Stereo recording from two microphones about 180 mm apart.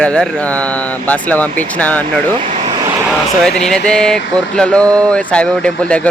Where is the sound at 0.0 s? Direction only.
5° left (ahead or behind).